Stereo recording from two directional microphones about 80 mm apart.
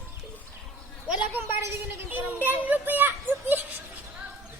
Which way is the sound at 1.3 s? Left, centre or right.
Right.